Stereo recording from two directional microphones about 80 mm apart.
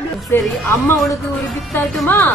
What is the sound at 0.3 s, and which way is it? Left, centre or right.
Speech, left.